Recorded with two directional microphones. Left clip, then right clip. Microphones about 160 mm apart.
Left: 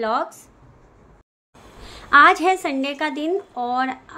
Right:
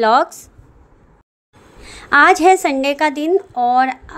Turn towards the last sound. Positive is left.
turn(degrees=-40)  # may be behind; listen again after turning